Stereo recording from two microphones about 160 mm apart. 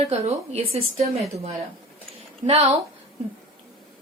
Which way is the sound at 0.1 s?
40° right (ahead or behind).